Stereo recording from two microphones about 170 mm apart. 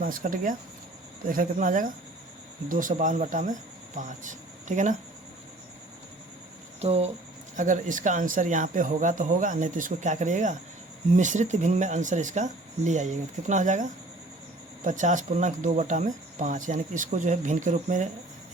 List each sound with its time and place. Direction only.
0.0 s speech: 55° right (ahead or behind)
6.8 s speech: 40° right (ahead or behind)